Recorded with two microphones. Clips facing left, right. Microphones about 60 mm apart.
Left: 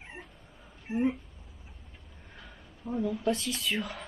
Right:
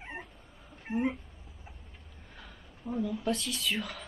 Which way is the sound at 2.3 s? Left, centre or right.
Centre.